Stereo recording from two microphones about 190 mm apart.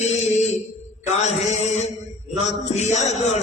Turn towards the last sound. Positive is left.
turn(degrees=35)  # may be behind; listen again after turning